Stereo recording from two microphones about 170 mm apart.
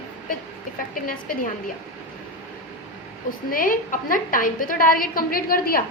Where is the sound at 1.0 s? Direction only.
55° left (ahead or behind).